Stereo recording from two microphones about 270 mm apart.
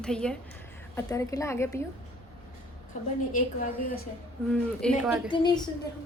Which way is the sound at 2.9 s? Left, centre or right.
Left.